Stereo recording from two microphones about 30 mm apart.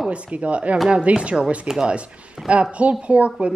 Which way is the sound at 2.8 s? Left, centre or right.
Right.